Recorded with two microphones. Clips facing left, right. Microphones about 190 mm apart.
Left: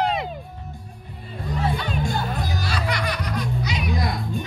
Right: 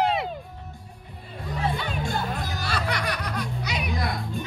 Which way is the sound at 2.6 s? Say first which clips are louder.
Even; 55° right (ahead or behind).